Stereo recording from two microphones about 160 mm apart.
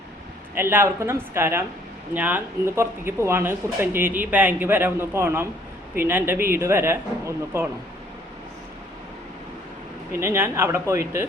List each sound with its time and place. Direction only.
0.5 s speech: 15° right (ahead or behind)
10.1 s speech: 15° right (ahead or behind)